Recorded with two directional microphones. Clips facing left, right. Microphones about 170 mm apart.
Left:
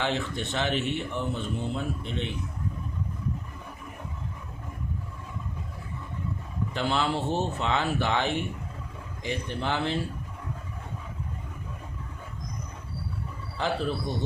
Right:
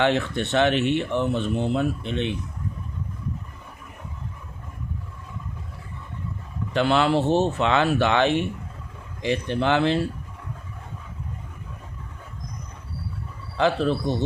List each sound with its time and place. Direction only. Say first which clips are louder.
0.0 s speech: right 7 dB; 65° right (ahead or behind)
6.7 s speech: right 8 dB; 70° right (ahead or behind)
13.6 s speech: right 7 dB; 75° right (ahead or behind)